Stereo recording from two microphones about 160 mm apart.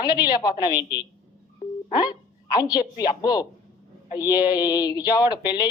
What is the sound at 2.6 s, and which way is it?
A man's voice, 25° left (ahead or behind).